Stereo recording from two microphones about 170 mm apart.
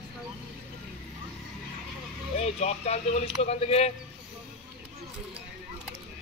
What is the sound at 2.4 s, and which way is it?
Speech, 40° left (ahead or behind).